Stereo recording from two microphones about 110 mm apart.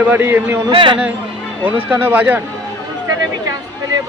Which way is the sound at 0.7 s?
50° right (ahead or behind).